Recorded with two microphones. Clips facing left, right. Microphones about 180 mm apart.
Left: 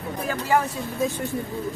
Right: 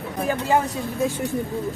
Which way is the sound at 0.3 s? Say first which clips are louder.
Right 2 dB; 20° right (ahead or behind).